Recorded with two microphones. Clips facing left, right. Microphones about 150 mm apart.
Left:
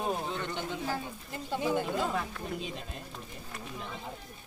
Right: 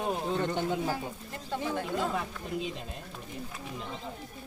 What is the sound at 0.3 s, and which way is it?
Speech, 45° right (ahead or behind).